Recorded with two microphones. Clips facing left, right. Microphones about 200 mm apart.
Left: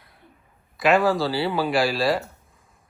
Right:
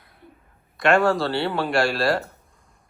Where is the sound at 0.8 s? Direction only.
Centre (ahead or behind).